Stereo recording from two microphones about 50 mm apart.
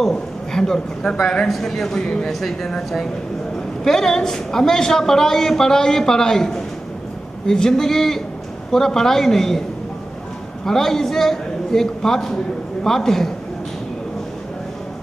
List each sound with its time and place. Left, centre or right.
0.0 s a man's voice: centre
2.4 s a woman's voice: centre
10.6 s a woman's voice: centre